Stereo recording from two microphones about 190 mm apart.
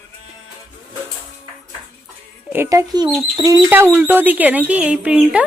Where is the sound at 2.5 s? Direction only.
15° right (ahead or behind).